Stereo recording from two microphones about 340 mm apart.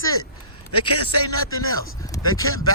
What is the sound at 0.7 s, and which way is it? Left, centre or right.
Speech, left.